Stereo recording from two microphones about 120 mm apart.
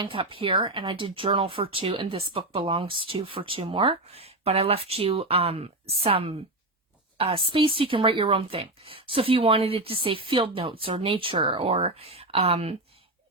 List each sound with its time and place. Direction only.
0.0 s speech: 45° right (ahead or behind)